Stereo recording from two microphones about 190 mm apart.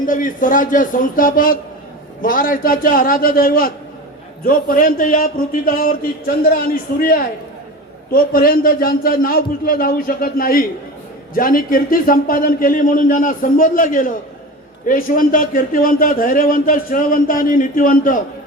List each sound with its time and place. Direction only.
0.0 s a man's voice: 45° left (ahead or behind)
8.1 s a man's voice: 50° left (ahead or behind)